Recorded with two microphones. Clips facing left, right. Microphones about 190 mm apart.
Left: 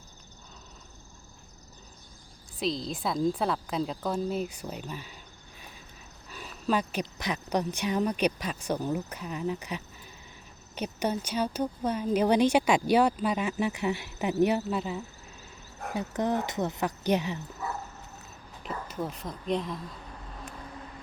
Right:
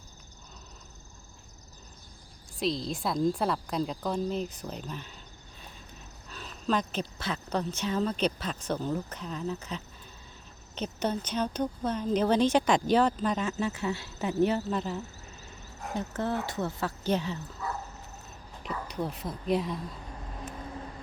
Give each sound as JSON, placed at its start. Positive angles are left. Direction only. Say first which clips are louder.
{"t": 2.6, "sound": "a woman's voice", "louder": "right 1 dB", "side_deg": 0}
{"t": 6.2, "sound": "speech", "louder": "left 1 dB", "side_deg": 10}
{"t": 16.0, "sound": "speech", "louder": "left 3 dB", "side_deg": 15}
{"t": 18.9, "sound": "a woman's voice", "louder": "right 2 dB", "side_deg": 0}